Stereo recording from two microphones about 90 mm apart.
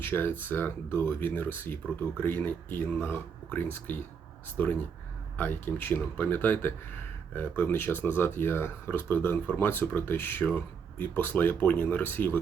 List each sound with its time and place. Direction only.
0.0 s speech: 20° left (ahead or behind)